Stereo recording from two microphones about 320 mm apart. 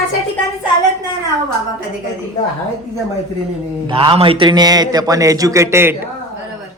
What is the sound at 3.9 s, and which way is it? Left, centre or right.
A man's voice, centre.